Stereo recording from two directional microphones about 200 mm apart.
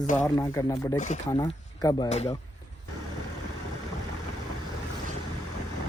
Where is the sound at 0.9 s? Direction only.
35° left (ahead or behind).